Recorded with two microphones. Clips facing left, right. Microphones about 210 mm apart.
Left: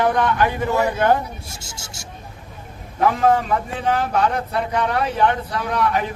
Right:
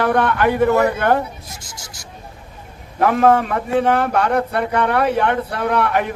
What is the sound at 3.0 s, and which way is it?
A man's voice, 65° right (ahead or behind).